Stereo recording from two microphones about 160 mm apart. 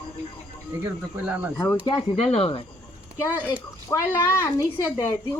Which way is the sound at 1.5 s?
20° left (ahead or behind).